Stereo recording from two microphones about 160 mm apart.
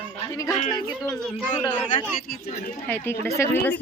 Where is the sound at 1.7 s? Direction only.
30° left (ahead or behind).